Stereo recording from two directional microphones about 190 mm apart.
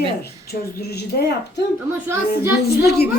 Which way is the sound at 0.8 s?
60° left (ahead or behind).